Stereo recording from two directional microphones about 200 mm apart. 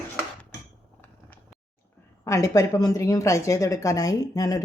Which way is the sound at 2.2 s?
15° left (ahead or behind).